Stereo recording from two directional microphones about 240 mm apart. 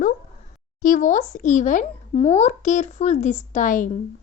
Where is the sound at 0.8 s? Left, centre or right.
Left.